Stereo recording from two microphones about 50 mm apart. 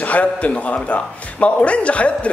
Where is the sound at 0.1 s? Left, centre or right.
Left.